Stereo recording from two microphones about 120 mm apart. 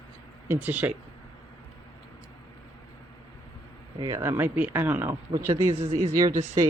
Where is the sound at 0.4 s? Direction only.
15° right (ahead or behind).